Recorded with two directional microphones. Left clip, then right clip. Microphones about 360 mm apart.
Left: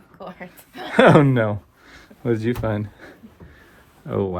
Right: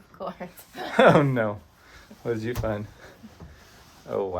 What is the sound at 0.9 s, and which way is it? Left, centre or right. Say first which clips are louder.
Speech: left 4 dB; left.